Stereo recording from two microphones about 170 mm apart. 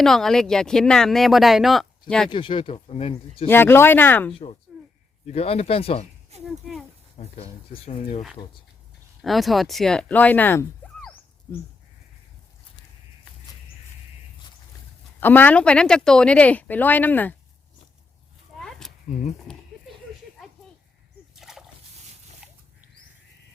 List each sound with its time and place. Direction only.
0.0 s speech: centre (ahead or behind)
2.3 s speech: 30° left (ahead or behind)
3.4 s speech: 15° left (ahead or behind)
4.3 s speech: 35° left (ahead or behind)
6.4 s speech: centre (ahead or behind)
7.2 s speech: 40° left (ahead or behind)
9.2 s speech: centre (ahead or behind)
15.2 s speech: 10° left (ahead or behind)
18.5 s a sound: centre (ahead or behind)
21.3 s splash: centre (ahead or behind)
22.4 s a sound: 5° right (ahead or behind)